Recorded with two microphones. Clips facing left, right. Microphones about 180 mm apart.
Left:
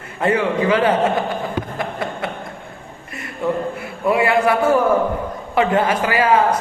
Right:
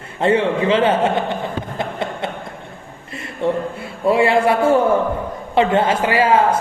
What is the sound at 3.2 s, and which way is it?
A man's voice, 25° right (ahead or behind).